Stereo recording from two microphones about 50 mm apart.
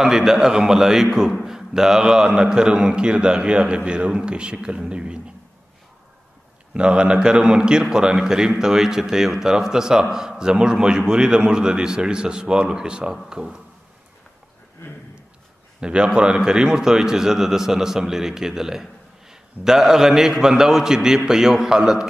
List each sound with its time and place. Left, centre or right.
0.0 s a man's voice: centre
6.7 s a man's voice: right
15.8 s a man's voice: centre